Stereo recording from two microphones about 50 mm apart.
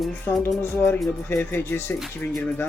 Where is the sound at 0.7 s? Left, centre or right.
Left.